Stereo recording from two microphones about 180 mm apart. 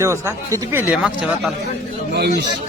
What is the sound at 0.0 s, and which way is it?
Speech, 15° right (ahead or behind).